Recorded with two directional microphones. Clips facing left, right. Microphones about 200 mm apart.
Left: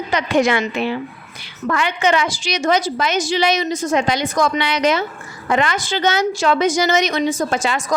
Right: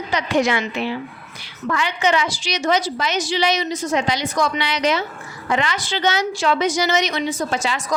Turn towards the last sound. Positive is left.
turn(degrees=50)  # may be behind; listen again after turning